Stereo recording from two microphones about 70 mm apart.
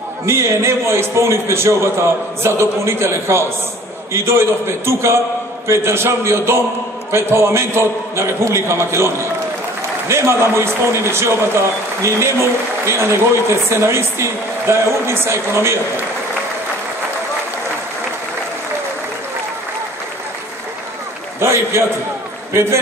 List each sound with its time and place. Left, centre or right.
0.3 s a man's voice: right
21.4 s a man's voice: right